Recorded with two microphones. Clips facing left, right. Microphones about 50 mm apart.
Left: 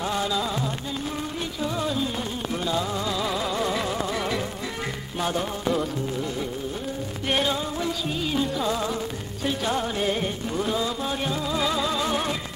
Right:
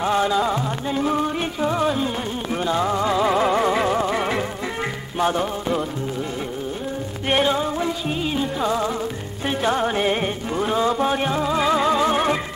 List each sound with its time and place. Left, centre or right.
0.0 s music: right
0.9 s music: right
1.6 s music: right
7.2 s music: right